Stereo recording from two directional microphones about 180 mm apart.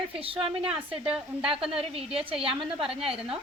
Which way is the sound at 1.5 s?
30° right (ahead or behind).